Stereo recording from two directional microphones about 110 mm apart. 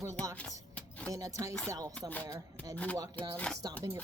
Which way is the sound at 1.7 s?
30° right (ahead or behind).